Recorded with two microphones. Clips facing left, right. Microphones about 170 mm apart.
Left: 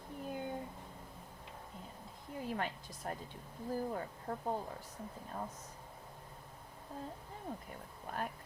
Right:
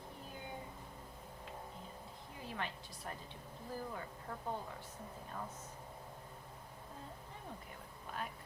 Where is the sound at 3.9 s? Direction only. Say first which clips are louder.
Left 6 dB; 40° left (ahead or behind).